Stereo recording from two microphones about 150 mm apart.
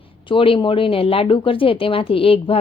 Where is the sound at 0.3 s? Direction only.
35° left (ahead or behind).